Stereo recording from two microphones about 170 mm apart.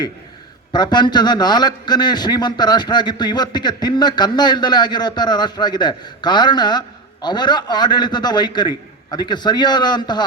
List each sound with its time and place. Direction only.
0.7 s a man's voice: 25° left (ahead or behind)